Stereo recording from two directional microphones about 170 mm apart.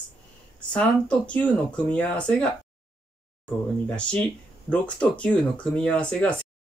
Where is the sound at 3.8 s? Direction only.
5° left (ahead or behind).